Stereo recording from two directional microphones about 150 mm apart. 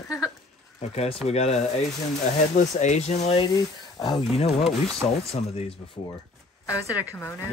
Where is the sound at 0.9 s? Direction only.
45° left (ahead or behind).